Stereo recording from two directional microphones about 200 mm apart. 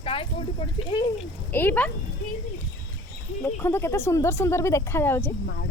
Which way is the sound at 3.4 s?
10° left (ahead or behind).